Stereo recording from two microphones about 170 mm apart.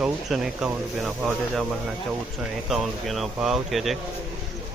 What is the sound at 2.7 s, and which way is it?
Speech, centre (ahead or behind).